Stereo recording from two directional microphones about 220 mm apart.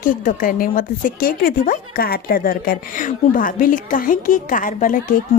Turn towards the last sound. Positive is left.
turn(degrees=35)  # may be behind; listen again after turning